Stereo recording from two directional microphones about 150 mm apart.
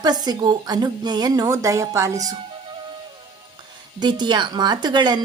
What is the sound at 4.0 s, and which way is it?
A woman's voice, 30° right (ahead or behind).